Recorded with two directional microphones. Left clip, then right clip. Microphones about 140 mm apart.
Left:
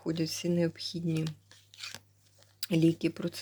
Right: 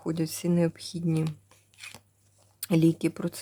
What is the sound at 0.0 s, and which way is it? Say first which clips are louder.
Speech: right 2 dB; 25° right (ahead or behind).